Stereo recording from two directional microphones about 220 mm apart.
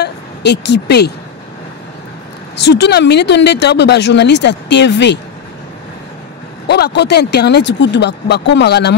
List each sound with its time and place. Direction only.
0.0 s vehicle: 50° left (ahead or behind)
2.5 s speech: 50° left (ahead or behind)
6.7 s speech: 50° left (ahead or behind)